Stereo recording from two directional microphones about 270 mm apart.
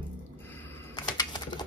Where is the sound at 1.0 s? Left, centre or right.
Centre.